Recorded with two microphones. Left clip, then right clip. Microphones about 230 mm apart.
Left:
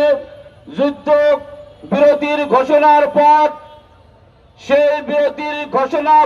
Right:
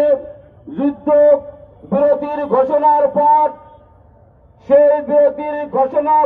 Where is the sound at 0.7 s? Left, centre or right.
Left.